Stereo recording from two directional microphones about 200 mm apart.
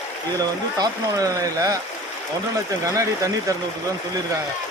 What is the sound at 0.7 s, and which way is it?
A man's voice, 20° right (ahead or behind).